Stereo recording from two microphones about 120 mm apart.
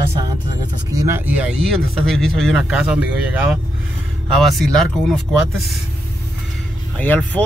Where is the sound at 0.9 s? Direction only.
25° right (ahead or behind).